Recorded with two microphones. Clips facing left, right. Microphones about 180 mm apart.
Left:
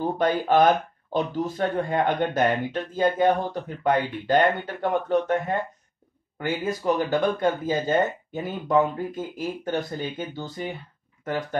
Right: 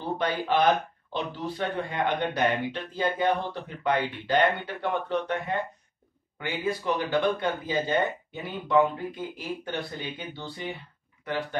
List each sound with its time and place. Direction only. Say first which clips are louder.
0.0 s speech: left 5 dB; 45° left (ahead or behind)